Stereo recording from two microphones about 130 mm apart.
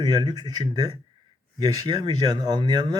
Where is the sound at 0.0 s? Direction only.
30° right (ahead or behind).